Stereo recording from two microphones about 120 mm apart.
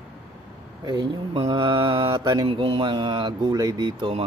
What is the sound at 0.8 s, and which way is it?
Speech, 35° right (ahead or behind).